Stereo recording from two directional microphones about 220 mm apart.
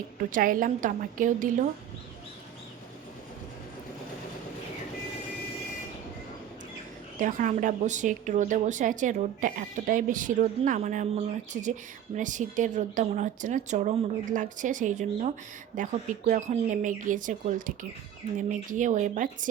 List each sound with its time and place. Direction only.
0.3 s speech: 40° right (ahead or behind)
7.2 s speech: 35° right (ahead or behind)